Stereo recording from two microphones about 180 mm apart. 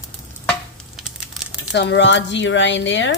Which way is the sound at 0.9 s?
Centre (ahead or behind).